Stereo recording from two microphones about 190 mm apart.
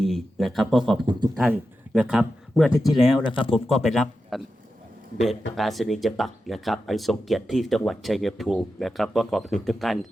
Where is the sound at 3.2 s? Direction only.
25° left (ahead or behind).